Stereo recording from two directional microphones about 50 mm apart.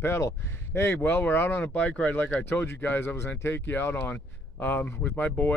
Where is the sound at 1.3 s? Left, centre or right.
Left.